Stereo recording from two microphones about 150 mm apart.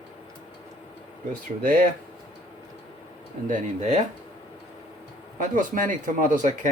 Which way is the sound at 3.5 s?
50° right (ahead or behind).